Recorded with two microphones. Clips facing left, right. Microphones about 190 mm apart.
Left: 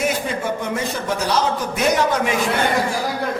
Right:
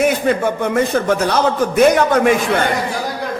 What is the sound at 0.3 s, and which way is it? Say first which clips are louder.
A man's voice: right 7 dB; 55° right (ahead or behind).